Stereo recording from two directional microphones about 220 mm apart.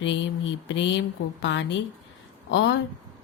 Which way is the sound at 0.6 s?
55° left (ahead or behind).